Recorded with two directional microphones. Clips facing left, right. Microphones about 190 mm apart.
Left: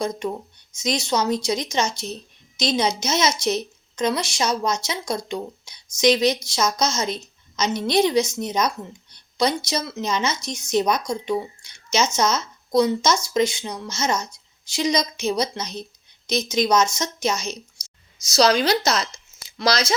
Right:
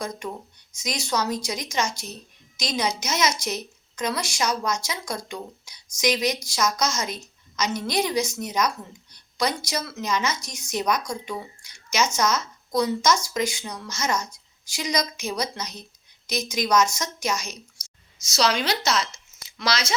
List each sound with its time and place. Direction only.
0.7 s speech: 25° left (ahead or behind)
18.3 s speech: 35° left (ahead or behind)